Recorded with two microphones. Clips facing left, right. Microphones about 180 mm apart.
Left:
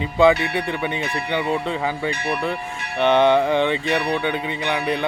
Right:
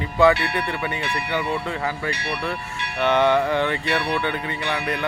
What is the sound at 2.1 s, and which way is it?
Speech, 50° left (ahead or behind).